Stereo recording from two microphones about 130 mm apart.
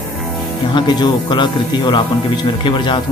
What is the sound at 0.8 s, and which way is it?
Speech, 35° left (ahead or behind).